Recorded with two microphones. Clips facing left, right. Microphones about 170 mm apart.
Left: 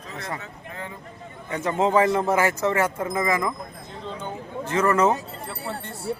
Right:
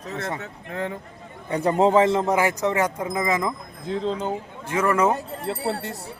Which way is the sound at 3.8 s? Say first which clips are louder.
Right 11 dB; 90° right.